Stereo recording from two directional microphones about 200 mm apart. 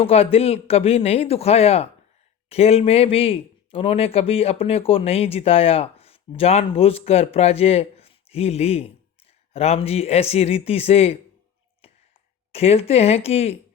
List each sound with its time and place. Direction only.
0.0 s speech: 30° left (ahead or behind)
12.5 s speech: 30° left (ahead or behind)